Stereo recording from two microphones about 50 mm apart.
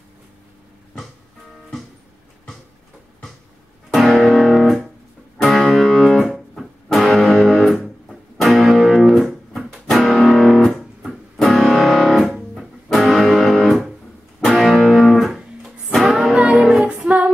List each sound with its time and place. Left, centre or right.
3.9 s music: centre
16.8 s music: right